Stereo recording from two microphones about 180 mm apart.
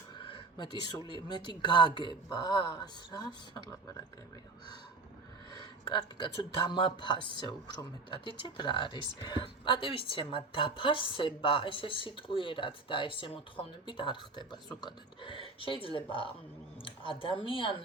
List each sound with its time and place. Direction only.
0.2 s a sound: 25° left (ahead or behind)
1.3 s speech: 25° left (ahead or behind)
5.9 s speech: 25° left (ahead or behind)